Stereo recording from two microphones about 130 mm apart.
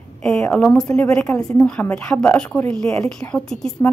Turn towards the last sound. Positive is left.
turn(degrees=5)  # may be behind; listen again after turning